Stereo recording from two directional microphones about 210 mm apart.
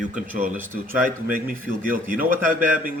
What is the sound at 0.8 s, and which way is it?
A man's voice, 40° right (ahead or behind).